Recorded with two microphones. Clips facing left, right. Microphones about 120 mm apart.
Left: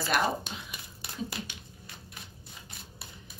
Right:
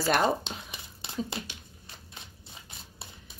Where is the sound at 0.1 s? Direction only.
25° right (ahead or behind).